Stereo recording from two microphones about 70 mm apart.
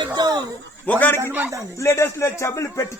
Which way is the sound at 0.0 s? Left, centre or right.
Right.